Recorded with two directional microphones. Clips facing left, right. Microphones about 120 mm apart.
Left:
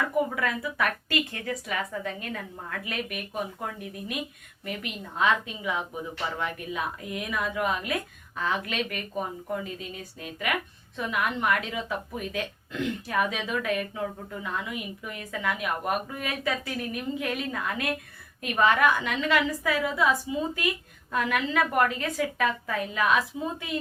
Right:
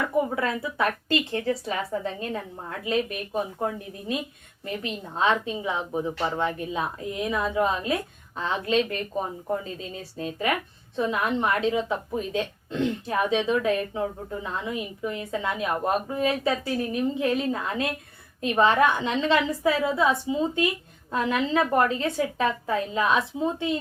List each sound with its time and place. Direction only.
0.0 s speech: 25° right (ahead or behind)